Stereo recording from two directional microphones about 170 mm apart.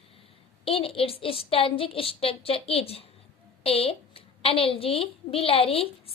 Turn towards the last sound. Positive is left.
turn(degrees=35)  # may be behind; listen again after turning